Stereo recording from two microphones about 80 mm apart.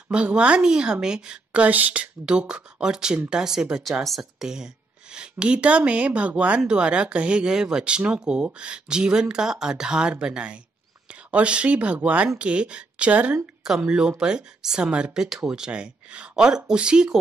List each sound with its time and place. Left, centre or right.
0.1 s speech: centre